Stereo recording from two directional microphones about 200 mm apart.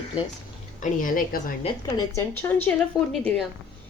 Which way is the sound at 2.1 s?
10° left (ahead or behind).